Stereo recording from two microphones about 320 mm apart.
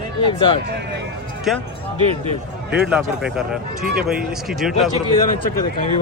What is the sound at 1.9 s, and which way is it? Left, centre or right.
Speech, centre.